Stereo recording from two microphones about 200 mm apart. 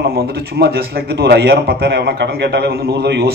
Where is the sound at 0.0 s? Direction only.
50° right (ahead or behind).